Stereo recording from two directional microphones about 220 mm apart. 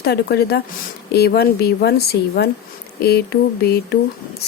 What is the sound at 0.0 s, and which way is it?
Speech, 45° left (ahead or behind).